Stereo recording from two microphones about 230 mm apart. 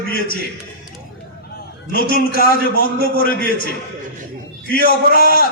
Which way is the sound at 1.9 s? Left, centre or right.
Left.